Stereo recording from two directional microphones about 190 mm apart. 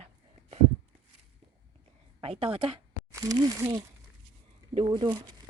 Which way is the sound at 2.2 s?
30° right (ahead or behind).